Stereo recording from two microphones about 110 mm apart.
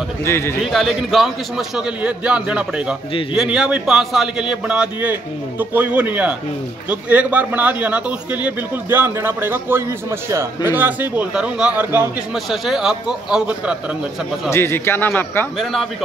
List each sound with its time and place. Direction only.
0.2 s speech: 25° left (ahead or behind)
0.7 s a man's voice: centre (ahead or behind)
12.4 s speech: 5° right (ahead or behind)
14.5 s speech: 25° left (ahead or behind)
15.6 s speech: 5° left (ahead or behind)